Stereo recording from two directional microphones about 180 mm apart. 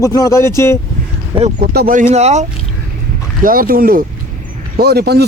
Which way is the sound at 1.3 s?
30° right (ahead or behind).